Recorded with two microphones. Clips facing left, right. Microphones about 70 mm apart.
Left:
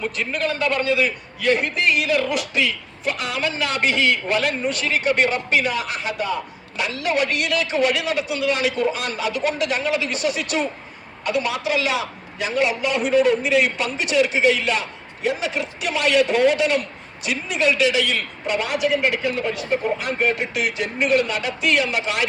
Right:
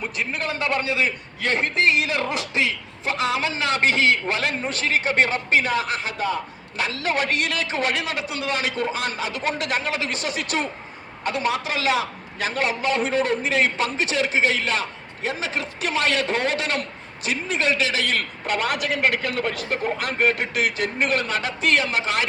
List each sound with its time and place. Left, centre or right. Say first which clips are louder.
0.0 s a man's voice: left 3 dB; right